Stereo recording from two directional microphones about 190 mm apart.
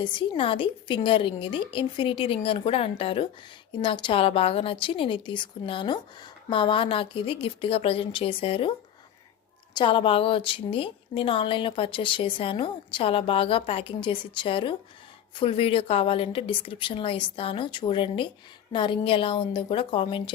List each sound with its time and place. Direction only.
0.0 s a woman's voice: 25° left (ahead or behind)
9.7 s a woman's voice: 25° left (ahead or behind)